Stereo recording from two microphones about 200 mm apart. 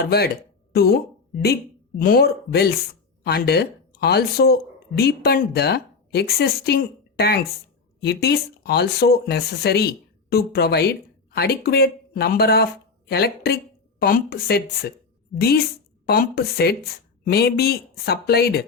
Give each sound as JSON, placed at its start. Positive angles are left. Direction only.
{"t": 0.0, "sound": "speech", "side_deg": 50}
{"t": 2.0, "sound": "speech", "side_deg": 50}